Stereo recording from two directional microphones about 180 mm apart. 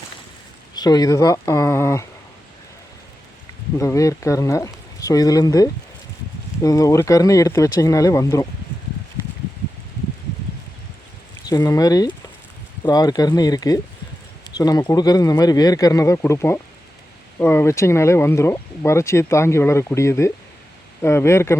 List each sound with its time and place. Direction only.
0.7 s speech: 20° left (ahead or behind)
3.8 s speech: 15° left (ahead or behind)
11.4 s speech: 20° left (ahead or behind)